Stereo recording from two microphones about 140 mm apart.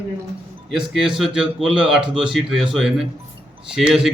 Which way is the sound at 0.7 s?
5° right (ahead or behind).